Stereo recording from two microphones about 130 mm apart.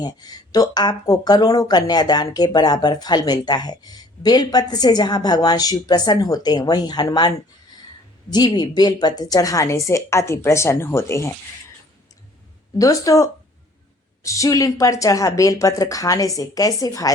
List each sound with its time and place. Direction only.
0.0 s a woman's voice: 30° left (ahead or behind)
12.8 s a woman's voice: 25° left (ahead or behind)